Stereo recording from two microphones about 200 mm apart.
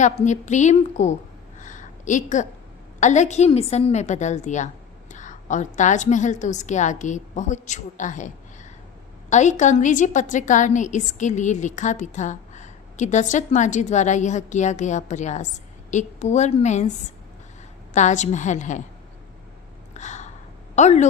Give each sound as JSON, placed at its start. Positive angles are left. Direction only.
{"t": 0.0, "sound": "a woman's voice", "side_deg": 35}
{"t": 1.5, "sound": "a sound", "side_deg": 40}
{"t": 3.0, "sound": "a woman's voice", "side_deg": 35}
{"t": 9.3, "sound": "a woman's voice", "side_deg": 35}
{"t": 17.9, "sound": "a woman's voice", "side_deg": 35}
{"t": 19.9, "sound": "gasp", "side_deg": 35}
{"t": 20.7, "sound": "a woman's voice", "side_deg": 35}